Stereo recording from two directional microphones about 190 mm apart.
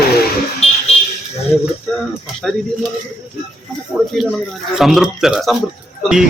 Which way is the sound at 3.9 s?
Centre (ahead or behind).